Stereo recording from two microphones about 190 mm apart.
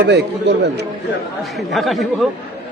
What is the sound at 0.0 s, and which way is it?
Speech, 60° right (ahead or behind).